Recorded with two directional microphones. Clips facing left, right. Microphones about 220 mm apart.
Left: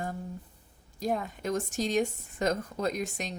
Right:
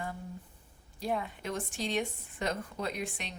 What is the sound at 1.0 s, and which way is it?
Speech, 45° left (ahead or behind).